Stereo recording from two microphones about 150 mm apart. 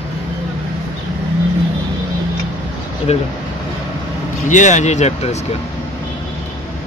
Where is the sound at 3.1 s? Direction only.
45° left (ahead or behind).